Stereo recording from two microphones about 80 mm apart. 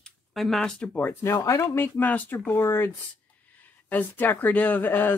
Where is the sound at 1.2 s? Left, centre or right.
Left.